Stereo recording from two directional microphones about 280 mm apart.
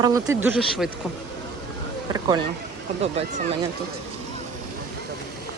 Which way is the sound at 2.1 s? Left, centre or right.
Centre.